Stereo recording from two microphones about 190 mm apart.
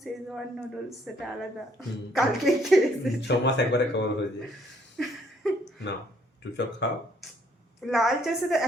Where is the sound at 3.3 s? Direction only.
65° left (ahead or behind).